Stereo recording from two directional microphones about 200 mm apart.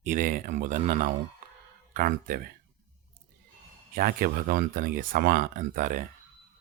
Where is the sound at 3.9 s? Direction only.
45° right (ahead or behind).